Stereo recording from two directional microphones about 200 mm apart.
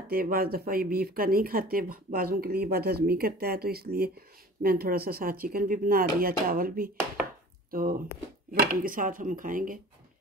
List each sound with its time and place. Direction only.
0.1 s speech: 45° right (ahead or behind)